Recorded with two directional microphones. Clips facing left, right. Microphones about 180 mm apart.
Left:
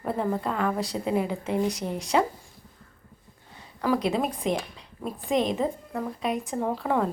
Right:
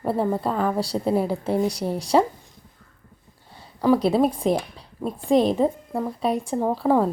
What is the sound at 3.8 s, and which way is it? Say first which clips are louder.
Speech: right 7 dB; 35° right (ahead or behind).